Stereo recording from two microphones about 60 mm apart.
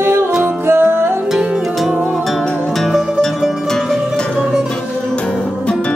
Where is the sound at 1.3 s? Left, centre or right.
Centre.